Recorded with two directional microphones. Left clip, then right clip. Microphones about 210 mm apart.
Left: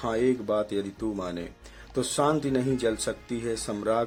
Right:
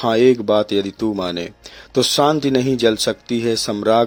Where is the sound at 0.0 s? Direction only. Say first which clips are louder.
Right 12 dB; 30° right (ahead or behind).